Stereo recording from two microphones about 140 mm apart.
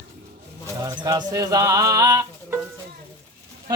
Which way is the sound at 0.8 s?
25° right (ahead or behind).